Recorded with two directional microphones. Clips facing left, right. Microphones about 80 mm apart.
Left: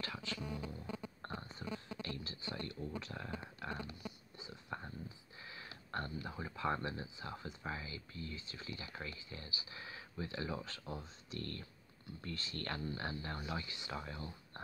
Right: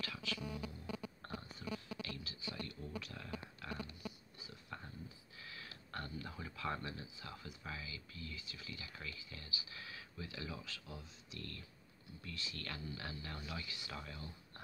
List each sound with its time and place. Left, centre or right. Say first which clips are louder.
0.0 s music: left 1 dB; left
4.4 s a sound: left 7 dB; left
5.4 s speech: left 2 dB; left